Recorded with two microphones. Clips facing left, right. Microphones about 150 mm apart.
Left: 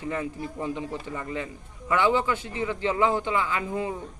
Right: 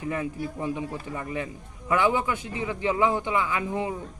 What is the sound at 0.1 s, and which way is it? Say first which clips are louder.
Speech: right 1 dB; 15° right (ahead or behind).